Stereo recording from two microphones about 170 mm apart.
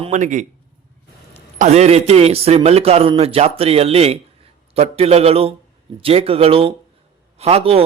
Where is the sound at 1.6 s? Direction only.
40° right (ahead or behind).